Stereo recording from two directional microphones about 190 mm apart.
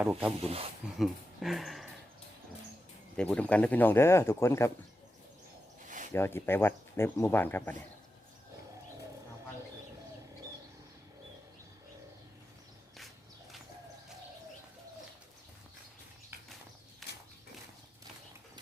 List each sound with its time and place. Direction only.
0.0 s speech: 5° right (ahead or behind)
0.4 s speech: 30° right (ahead or behind)
0.9 s speech: centre (ahead or behind)
3.2 s speech: 5° left (ahead or behind)
6.1 s speech: 10° left (ahead or behind)
17.0 s a sound: centre (ahead or behind)